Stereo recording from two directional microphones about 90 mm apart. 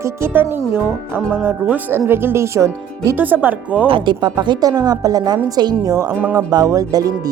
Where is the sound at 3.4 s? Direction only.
15° right (ahead or behind).